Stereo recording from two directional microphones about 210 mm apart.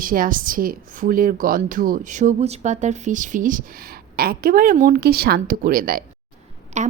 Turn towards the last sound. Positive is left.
turn(degrees=-35)  # may be behind; listen again after turning